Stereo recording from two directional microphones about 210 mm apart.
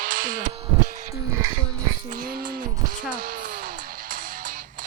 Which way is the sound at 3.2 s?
40° right (ahead or behind).